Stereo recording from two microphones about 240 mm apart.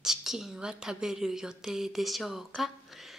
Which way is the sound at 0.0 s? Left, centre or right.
Centre.